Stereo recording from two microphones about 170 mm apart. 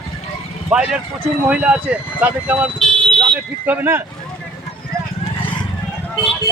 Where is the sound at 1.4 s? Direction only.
5° right (ahead or behind).